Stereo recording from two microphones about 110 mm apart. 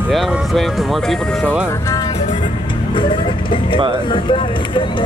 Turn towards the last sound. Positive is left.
turn(degrees=50)  # may be behind; listen again after turning